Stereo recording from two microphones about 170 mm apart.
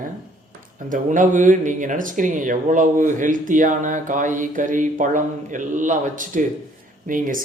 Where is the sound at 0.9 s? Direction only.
50° right (ahead or behind).